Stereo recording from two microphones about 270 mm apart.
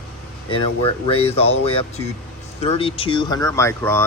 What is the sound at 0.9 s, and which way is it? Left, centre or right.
Speech, left.